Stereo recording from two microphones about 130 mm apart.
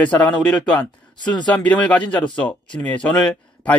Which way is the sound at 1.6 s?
10° left (ahead or behind).